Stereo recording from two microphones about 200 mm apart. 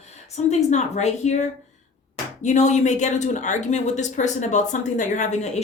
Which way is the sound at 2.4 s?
35° left (ahead or behind).